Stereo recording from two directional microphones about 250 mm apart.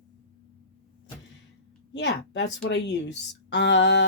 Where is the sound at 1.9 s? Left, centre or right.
Left.